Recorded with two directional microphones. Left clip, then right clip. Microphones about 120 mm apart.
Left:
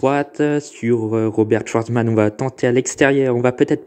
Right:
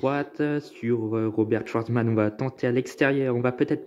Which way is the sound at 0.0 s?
35° left (ahead or behind).